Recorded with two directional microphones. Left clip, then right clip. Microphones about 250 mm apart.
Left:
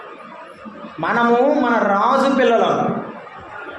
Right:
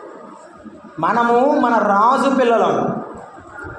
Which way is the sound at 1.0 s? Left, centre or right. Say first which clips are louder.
Right 1 dB; right.